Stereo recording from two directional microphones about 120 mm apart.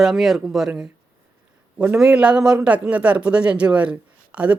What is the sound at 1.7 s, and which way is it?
A man's voice, 15° right (ahead or behind).